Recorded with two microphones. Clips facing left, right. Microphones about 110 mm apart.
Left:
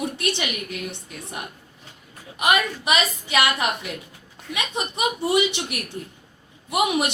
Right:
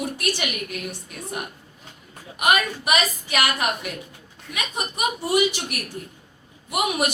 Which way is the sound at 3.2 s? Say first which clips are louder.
Left 1 dB; 25° left (ahead or behind).